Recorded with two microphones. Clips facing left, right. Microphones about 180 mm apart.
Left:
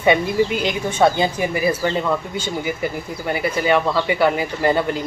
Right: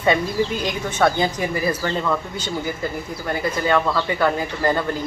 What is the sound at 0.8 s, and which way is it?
Speech, 10° left (ahead or behind).